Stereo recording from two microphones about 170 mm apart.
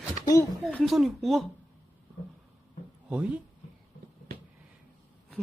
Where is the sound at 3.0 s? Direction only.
5° right (ahead or behind).